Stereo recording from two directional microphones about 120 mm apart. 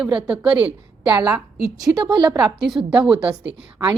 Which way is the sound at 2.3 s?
5° right (ahead or behind).